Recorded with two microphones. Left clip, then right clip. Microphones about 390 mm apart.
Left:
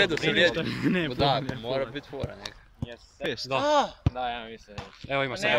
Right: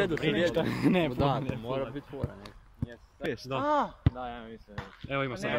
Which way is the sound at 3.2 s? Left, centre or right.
Centre.